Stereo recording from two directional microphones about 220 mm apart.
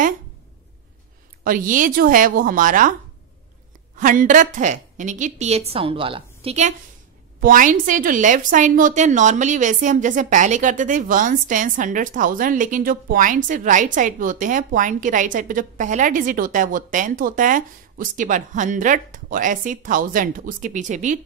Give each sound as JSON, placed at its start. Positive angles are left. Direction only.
{"t": 1.4, "sound": "a woman's voice", "side_deg": -40}
{"t": 3.9, "sound": "a woman's voice", "side_deg": -35}
{"t": 7.3, "sound": "a woman's voice", "side_deg": -40}